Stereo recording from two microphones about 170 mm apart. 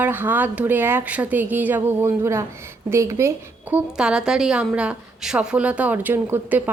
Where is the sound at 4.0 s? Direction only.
5° right (ahead or behind).